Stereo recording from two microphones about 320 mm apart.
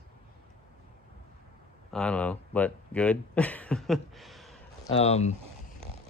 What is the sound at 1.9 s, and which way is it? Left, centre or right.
Speech, centre.